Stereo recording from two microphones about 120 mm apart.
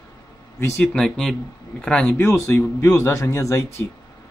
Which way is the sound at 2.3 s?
20° left (ahead or behind).